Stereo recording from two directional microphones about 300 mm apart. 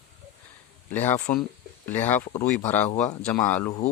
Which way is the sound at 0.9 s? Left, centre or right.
Centre.